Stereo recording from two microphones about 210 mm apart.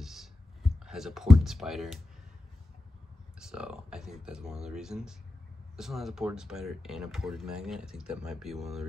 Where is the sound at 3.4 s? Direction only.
5° right (ahead or behind).